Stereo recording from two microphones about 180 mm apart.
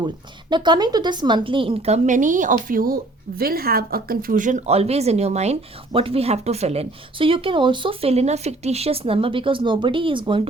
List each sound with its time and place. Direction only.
0.5 s a woman's voice: 25° right (ahead or behind)